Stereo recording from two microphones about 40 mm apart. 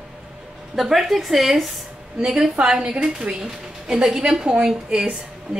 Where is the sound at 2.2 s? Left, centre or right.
Centre.